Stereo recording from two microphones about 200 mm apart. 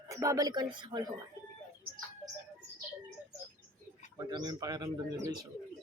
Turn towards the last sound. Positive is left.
turn(degrees=-20)  # may be behind; listen again after turning